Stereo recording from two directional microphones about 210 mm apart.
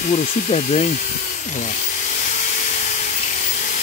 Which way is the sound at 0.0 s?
35° left (ahead or behind).